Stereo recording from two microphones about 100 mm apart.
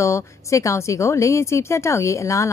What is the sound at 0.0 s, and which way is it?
A woman's voice, 30° left (ahead or behind).